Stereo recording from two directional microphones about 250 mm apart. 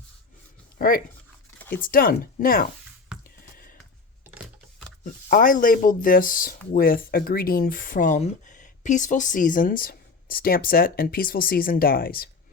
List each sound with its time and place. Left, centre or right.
0.8 s speech: left
1.5 s zipper: centre
1.8 s speech: left
3.2 s a sound: left
5.0 s speech: left